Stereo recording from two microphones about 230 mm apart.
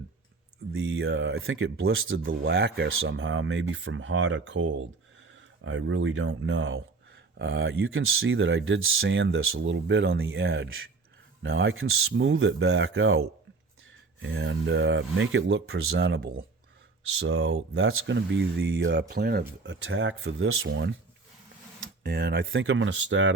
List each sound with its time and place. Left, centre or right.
0.7 s speech: right
17.2 s speech: right
22.0 s speech: right
22.5 s speech: right